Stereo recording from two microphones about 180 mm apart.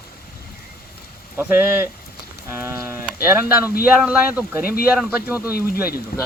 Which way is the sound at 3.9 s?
5° right (ahead or behind).